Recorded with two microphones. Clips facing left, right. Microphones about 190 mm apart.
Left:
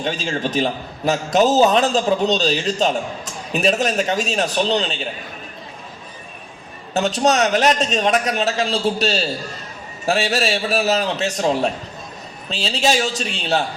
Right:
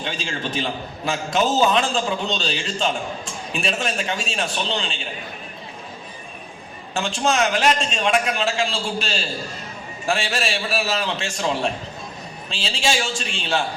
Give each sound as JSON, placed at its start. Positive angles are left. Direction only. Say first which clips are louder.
{"t": 0.0, "sound": "a man's voice", "louder": "left 5 dB", "side_deg": 40}
{"t": 6.9, "sound": "a man's voice", "louder": "left 5 dB", "side_deg": 40}